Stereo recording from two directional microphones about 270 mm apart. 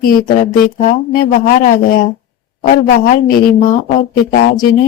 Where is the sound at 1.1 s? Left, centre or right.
Left.